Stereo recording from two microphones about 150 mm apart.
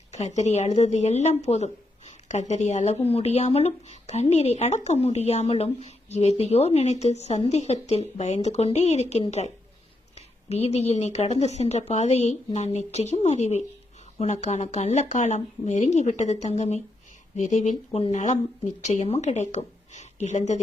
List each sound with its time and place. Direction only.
0.1 s speech: 50° left (ahead or behind)